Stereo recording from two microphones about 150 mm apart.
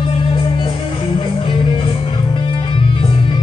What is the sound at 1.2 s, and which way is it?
Music, 35° left (ahead or behind).